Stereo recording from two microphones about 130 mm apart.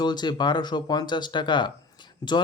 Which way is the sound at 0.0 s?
35° left (ahead or behind).